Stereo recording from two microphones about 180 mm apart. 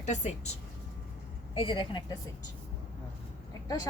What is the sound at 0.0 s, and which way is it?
Speech, 40° left (ahead or behind).